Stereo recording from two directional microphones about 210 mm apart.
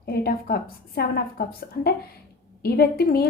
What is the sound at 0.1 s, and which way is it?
Speech, 45° left (ahead or behind).